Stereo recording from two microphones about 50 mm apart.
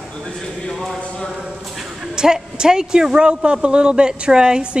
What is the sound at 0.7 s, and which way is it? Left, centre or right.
Clip-clop, centre.